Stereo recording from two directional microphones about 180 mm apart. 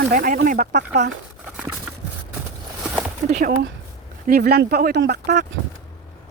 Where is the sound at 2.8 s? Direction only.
5° right (ahead or behind).